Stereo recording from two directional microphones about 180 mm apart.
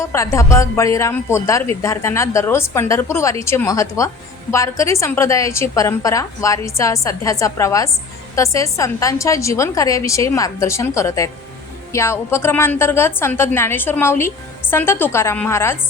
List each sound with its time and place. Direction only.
0.0 s a woman's voice: 15° left (ahead or behind)